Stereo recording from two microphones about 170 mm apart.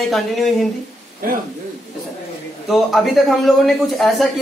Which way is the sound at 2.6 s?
Centre (ahead or behind).